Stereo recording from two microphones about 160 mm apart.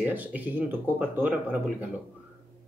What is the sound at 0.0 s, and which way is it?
Speech, 10° right (ahead or behind).